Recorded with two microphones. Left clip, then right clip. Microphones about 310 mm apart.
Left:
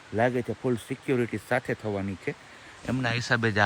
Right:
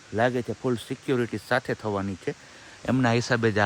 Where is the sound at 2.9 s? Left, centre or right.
Right.